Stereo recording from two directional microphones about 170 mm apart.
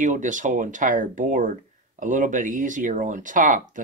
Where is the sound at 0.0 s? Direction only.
50° right (ahead or behind).